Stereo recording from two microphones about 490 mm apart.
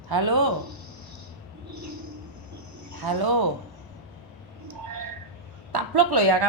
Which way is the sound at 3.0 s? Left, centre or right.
Right.